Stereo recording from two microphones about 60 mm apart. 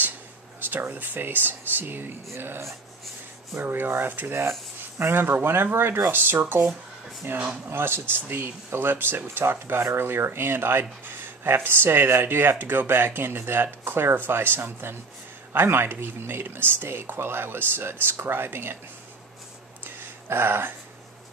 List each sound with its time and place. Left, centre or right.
0.6 s speech: right
7.7 s speech: right
19.8 s a sound: right